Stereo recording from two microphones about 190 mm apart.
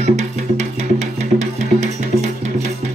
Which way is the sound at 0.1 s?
35° right (ahead or behind).